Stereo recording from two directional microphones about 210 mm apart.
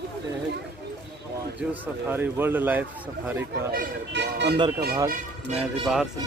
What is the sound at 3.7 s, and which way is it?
Speech, 50° right (ahead or behind).